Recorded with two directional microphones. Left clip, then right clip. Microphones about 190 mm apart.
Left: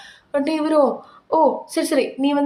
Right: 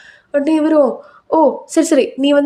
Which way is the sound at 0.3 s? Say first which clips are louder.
Right 5 dB; 20° right (ahead or behind).